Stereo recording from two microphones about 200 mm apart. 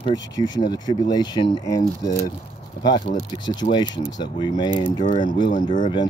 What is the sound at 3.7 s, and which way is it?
Speech, 20° left (ahead or behind).